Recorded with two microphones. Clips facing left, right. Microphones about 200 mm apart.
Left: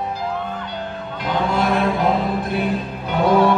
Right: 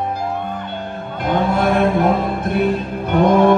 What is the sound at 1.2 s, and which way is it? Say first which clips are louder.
Music: right 3 dB; 55° right (ahead or behind).